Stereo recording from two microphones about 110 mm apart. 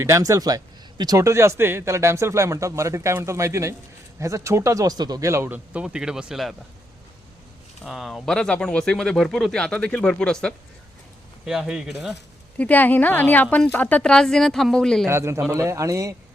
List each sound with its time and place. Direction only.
0.0 s speech: 30° right (ahead or behind)
5.7 s speech: 5° right (ahead or behind)
7.9 s speech: centre (ahead or behind)
11.4 s speech: 5° right (ahead or behind)
12.5 s speech: 15° left (ahead or behind)
15.0 s speech: 25° right (ahead or behind)